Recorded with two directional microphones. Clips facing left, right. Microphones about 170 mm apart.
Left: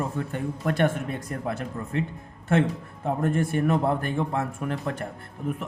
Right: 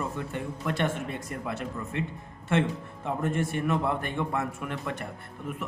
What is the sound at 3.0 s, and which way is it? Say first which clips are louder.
A man's voice: left 4 dB; 40° left (ahead or behind).